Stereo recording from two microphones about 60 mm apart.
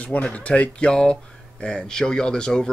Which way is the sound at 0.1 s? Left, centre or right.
Left.